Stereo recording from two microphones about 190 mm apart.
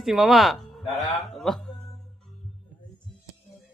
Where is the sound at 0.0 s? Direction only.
Centre (ahead or behind).